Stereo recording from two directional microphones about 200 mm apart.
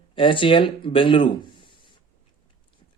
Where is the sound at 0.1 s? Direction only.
25° left (ahead or behind).